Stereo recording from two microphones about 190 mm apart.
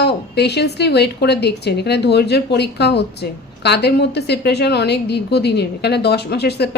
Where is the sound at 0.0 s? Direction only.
60° left (ahead or behind).